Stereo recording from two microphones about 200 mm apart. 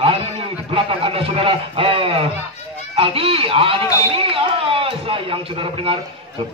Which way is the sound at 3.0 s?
30° right (ahead or behind).